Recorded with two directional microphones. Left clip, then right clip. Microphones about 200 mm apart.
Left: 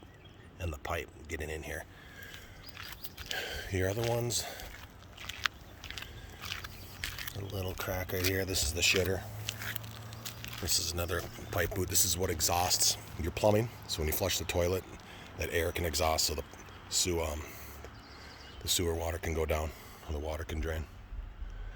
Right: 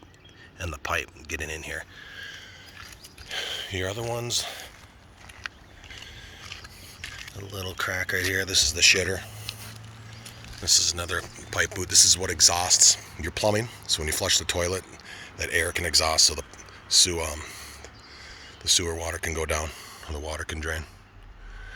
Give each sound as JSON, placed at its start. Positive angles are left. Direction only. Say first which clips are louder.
{"t": 0.6, "sound": "speech", "louder": "right 8 dB", "side_deg": -5}
{"t": 3.3, "sound": "a sound", "louder": "right 6 dB", "side_deg": 15}
{"t": 4.2, "sound": "speech", "louder": "right 6 dB", "side_deg": 15}
{"t": 7.5, "sound": "speech", "louder": "right 9 dB", "side_deg": 10}
{"t": 10.6, "sound": "speech", "louder": "right 11 dB", "side_deg": 10}
{"t": 16.9, "sound": "a sound", "louder": "right 10 dB", "side_deg": 5}
{"t": 18.6, "sound": "speech", "louder": "right 8 dB", "side_deg": 10}